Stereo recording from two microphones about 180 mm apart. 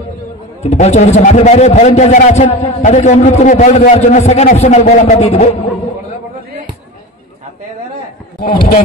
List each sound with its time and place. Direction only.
0.6 s a man's voice: 40° left (ahead or behind)
8.4 s a man's voice: 50° left (ahead or behind)